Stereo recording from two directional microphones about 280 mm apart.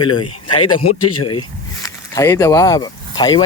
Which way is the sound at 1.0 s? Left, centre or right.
Left.